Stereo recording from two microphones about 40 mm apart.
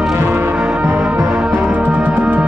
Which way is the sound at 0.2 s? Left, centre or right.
Right.